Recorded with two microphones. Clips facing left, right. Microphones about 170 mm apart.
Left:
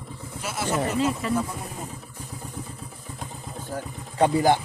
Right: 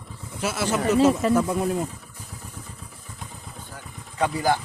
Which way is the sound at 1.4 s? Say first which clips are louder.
Right 7 dB; 90° right.